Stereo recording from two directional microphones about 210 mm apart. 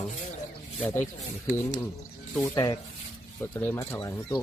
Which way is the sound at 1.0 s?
35° left (ahead or behind).